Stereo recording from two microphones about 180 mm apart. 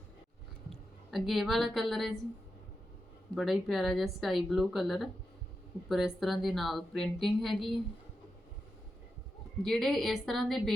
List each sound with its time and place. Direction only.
0.7 s a woman's voice: centre (ahead or behind)
3.3 s a woman's voice: centre (ahead or behind)
9.6 s a woman's voice: centre (ahead or behind)